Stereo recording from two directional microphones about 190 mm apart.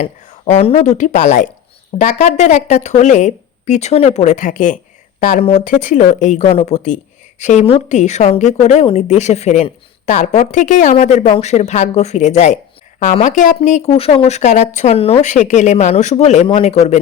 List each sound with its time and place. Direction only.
0.0 s speech: 40° left (ahead or behind)